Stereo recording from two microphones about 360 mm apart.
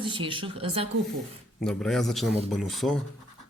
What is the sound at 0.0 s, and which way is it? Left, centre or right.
Speech, centre.